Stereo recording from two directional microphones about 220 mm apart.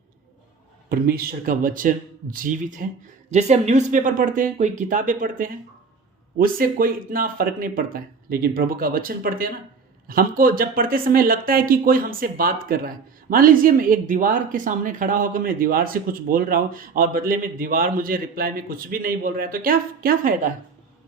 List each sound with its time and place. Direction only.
0.9 s a woman's voice: 40° right (ahead or behind)